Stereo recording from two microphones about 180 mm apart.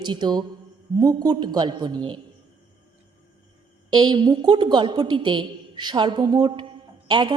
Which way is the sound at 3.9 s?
25° right (ahead or behind).